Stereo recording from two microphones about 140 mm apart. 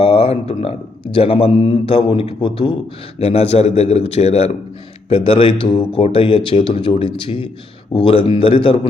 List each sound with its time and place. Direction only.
0.0 s speech: 40° left (ahead or behind)
3.2 s a man's voice: 50° left (ahead or behind)